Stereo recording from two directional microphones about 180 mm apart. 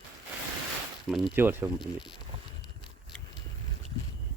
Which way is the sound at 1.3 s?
10° right (ahead or behind).